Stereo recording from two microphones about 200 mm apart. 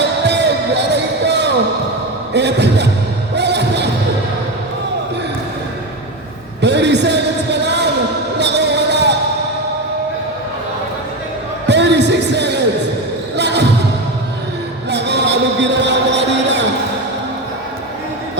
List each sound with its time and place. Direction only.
0.0 s music: 60° right (ahead or behind)
2.3 s speech: 60° right (ahead or behind)
3.3 s music: 60° right (ahead or behind)
6.6 s a sound: 60° right (ahead or behind)
8.4 s music: 60° right (ahead or behind)
11.6 s music: 60° right (ahead or behind)
14.8 s a sound: 60° right (ahead or behind)